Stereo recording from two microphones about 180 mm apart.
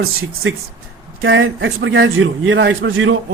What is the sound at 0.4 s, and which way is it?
A man's voice, 90° right.